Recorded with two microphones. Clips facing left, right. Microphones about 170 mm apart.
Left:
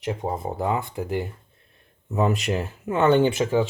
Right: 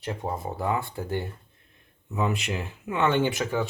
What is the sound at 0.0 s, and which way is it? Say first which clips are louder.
Speech: left 4 dB; 20° left (ahead or behind).